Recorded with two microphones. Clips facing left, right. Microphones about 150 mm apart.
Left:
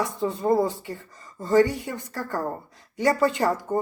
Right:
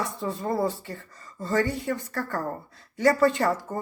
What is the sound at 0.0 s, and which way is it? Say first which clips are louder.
Speech: left 4 dB; 20° left (ahead or behind).